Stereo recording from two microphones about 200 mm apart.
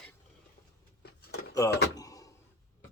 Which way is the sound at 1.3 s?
55° left (ahead or behind).